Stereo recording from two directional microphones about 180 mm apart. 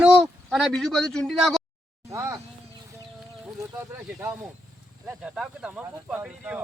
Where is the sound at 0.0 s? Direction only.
5° right (ahead or behind).